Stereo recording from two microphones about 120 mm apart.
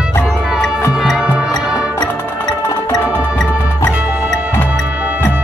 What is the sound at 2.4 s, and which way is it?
Music, 35° left (ahead or behind).